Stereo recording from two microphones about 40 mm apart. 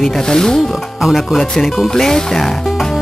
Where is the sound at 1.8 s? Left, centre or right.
Centre.